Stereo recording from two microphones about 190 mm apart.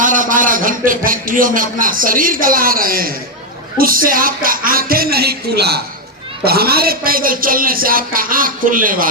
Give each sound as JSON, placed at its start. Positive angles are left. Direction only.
{"t": 0.0, "sound": "a man's voice", "side_deg": -45}